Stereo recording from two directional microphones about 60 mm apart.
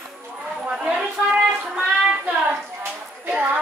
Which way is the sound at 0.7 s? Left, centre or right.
Centre.